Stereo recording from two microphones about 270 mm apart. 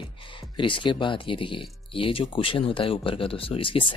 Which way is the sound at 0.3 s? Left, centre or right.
Centre.